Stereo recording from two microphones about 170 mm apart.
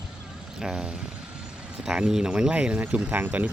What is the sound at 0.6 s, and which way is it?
Speech, 5° right (ahead or behind).